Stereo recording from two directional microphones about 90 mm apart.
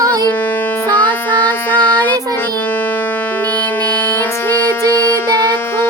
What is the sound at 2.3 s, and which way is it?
Music, 20° left (ahead or behind).